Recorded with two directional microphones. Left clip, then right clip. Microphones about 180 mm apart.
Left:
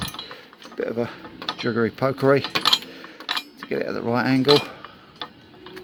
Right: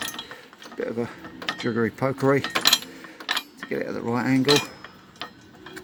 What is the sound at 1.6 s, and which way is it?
Speech, 5° left (ahead or behind).